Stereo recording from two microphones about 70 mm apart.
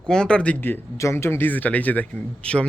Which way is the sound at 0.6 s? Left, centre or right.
Left.